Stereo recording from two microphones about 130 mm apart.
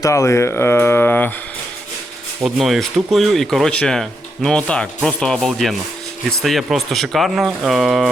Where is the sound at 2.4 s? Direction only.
Centre (ahead or behind).